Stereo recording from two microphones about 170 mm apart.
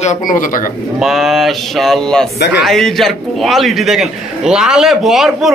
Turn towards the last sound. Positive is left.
turn(degrees=0)  # may be behind; listen again after turning